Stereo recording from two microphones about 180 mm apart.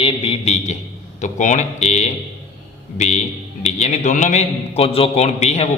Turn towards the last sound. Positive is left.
turn(degrees=35)  # may be behind; listen again after turning